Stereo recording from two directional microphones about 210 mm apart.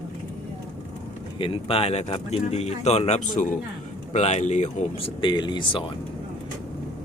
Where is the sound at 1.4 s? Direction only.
25° left (ahead or behind).